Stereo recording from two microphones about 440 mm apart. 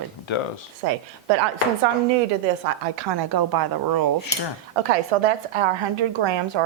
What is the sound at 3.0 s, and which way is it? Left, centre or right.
Speech, right.